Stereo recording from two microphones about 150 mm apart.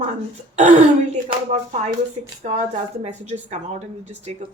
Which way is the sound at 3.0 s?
50° right (ahead or behind).